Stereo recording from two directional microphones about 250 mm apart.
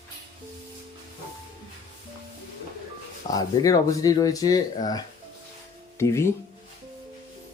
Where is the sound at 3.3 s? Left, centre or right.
Centre.